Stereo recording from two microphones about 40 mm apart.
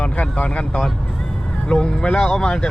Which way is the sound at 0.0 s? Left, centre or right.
Left.